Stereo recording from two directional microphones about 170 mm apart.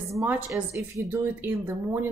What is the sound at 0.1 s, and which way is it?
A woman's voice, 15° right (ahead or behind).